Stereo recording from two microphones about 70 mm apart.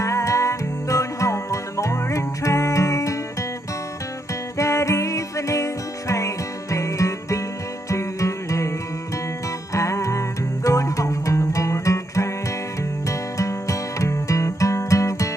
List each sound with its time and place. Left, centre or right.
0.0 s music: left
4.6 s music: left
9.8 s music: left
13.4 s music: left